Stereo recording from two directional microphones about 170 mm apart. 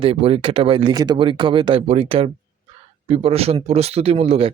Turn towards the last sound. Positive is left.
turn(degrees=-35)  # may be behind; listen again after turning